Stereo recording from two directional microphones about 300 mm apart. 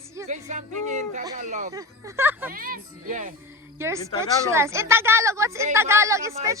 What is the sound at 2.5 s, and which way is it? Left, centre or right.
Speech, right.